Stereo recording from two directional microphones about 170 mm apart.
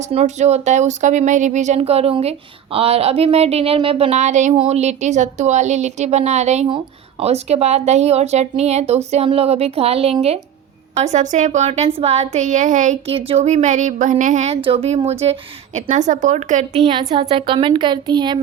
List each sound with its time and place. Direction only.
0.0 s a woman's voice: 40° right (ahead or behind)
16.8 s a woman's voice: 25° right (ahead or behind)